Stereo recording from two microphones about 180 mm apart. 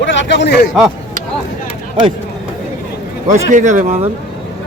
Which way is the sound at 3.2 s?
45° right (ahead or behind).